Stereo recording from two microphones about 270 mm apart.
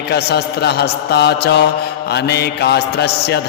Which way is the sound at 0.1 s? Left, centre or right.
Left.